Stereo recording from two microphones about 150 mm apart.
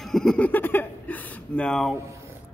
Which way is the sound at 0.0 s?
5° left (ahead or behind).